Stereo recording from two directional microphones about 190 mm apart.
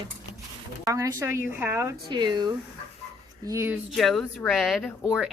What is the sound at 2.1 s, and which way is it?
A woman's voice, 25° right (ahead or behind).